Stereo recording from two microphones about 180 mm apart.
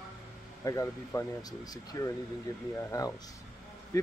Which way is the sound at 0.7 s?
20° left (ahead or behind).